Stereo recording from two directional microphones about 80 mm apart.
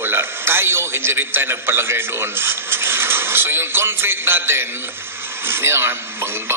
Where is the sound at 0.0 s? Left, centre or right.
Right.